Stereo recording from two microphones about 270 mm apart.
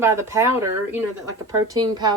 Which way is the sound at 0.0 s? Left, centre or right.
Centre.